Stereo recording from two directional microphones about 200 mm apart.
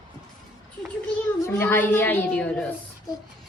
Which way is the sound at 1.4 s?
10° left (ahead or behind).